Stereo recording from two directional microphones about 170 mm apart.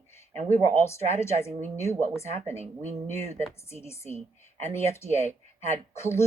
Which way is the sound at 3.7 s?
15° left (ahead or behind).